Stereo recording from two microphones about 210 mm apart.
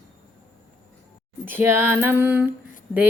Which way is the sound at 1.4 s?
10° right (ahead or behind).